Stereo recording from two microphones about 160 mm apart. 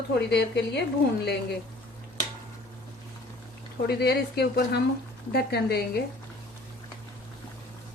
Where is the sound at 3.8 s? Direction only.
90° left.